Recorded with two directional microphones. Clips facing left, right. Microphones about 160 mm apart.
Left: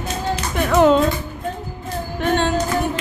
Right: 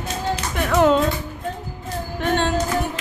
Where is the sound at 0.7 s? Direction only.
20° left (ahead or behind).